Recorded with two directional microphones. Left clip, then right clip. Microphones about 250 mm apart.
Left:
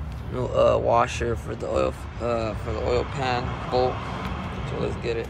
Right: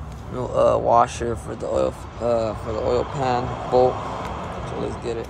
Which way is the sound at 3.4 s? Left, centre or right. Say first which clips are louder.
Right 6 dB; right.